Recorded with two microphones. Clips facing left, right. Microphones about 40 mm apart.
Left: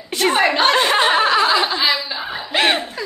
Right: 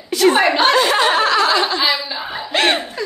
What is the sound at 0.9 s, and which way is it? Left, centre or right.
Chuckle, centre.